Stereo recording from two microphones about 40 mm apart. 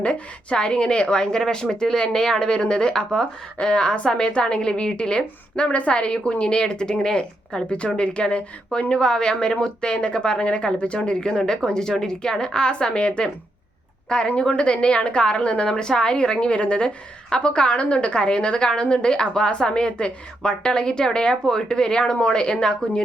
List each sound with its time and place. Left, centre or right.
0.5 s speech: left